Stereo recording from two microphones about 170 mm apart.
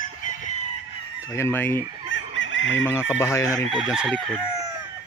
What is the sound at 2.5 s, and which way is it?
Speech, 90° left.